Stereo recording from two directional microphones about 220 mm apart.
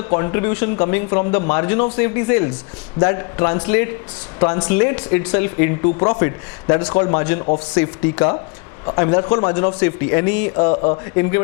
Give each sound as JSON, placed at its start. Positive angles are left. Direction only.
{"t": 0.1, "sound": "a man's voice", "side_deg": 20}
{"t": 5.8, "sound": "a man's voice", "side_deg": 25}
{"t": 7.7, "sound": "speech", "side_deg": 10}
{"t": 8.9, "sound": "a man's voice", "side_deg": 20}
{"t": 10.6, "sound": "a man's voice", "side_deg": 25}